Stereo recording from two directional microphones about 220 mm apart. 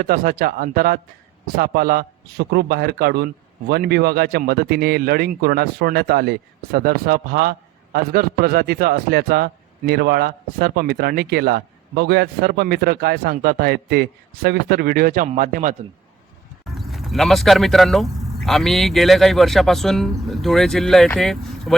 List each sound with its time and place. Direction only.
0.0 s speech: 40° right (ahead or behind)
16.6 s speech: centre (ahead or behind)